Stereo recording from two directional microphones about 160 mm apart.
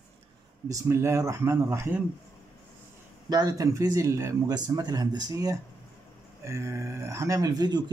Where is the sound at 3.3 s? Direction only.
25° right (ahead or behind).